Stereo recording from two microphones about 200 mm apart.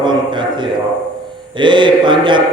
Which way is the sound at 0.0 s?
20° right (ahead or behind).